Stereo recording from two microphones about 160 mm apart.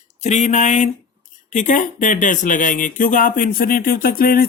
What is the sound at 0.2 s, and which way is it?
Speech, 45° left (ahead or behind).